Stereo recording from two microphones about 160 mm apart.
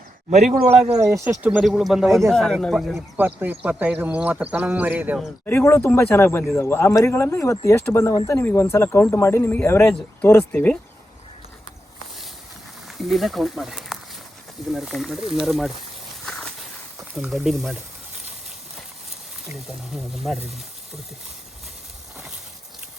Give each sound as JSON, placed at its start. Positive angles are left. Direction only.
{"t": 0.9, "sound": "speech", "side_deg": -20}
{"t": 3.2, "sound": "speech", "side_deg": -10}
{"t": 5.5, "sound": "speech", "side_deg": 15}
{"t": 13.0, "sound": "speech", "side_deg": 0}
{"t": 16.2, "sound": "a sound", "side_deg": 0}
{"t": 17.2, "sound": "speech", "side_deg": -5}
{"t": 19.5, "sound": "speech", "side_deg": 0}